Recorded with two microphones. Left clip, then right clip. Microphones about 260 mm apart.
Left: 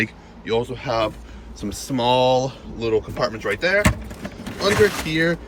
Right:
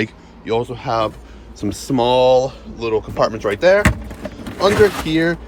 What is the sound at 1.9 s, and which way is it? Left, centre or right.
Speech, centre.